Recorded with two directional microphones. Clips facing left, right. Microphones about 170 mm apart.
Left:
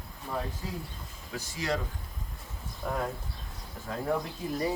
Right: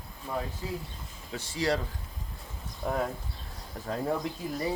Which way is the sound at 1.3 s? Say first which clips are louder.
Right 3 dB; 30° right (ahead or behind).